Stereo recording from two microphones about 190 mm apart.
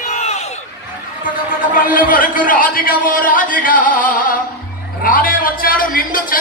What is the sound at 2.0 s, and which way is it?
A man's voice, 45° left (ahead or behind).